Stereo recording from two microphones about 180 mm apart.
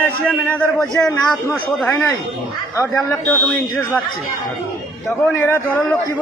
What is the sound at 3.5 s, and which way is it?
Speech, centre (ahead or behind).